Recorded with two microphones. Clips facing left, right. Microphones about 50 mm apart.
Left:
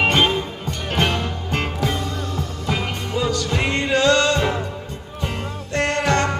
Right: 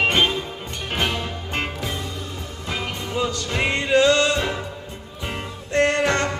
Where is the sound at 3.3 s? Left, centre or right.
Right.